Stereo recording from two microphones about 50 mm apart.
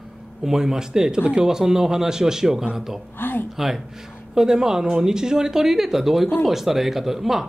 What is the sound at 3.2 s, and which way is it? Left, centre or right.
Speech, left.